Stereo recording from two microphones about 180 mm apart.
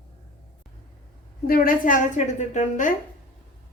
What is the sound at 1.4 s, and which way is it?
A woman's voice, 55° left (ahead or behind).